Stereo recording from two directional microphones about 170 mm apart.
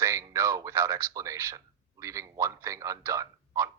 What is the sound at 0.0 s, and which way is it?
A man's voice, 20° right (ahead or behind).